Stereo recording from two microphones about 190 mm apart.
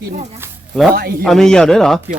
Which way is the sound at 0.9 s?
50° right (ahead or behind).